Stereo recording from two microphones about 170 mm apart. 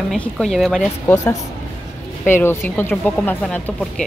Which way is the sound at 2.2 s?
15° left (ahead or behind).